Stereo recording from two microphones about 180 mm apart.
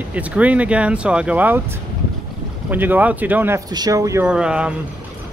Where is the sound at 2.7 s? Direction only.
10° right (ahead or behind).